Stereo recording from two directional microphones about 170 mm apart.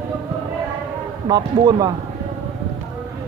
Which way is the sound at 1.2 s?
25° right (ahead or behind).